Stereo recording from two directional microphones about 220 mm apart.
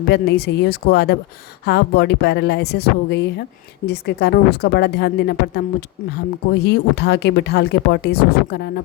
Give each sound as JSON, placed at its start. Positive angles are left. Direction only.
{"t": 0.1, "sound": "speech", "side_deg": 50}